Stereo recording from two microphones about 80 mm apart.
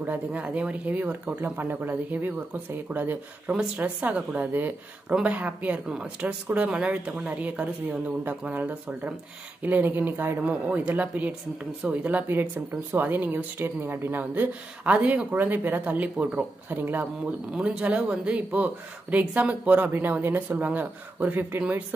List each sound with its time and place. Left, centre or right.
0.0 s speech: right